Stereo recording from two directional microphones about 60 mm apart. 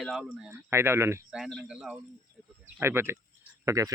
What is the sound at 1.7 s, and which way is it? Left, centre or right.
Speech, centre.